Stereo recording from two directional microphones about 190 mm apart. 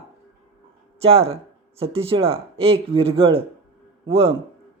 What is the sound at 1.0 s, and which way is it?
A man's voice, 30° right (ahead or behind).